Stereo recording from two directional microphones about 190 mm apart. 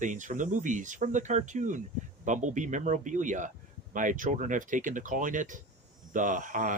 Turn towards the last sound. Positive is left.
turn(degrees=-40)  # may be behind; listen again after turning